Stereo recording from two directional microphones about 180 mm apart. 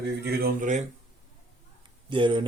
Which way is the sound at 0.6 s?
45° right (ahead or behind).